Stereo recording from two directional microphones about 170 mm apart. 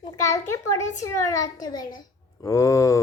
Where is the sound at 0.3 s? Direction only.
15° left (ahead or behind).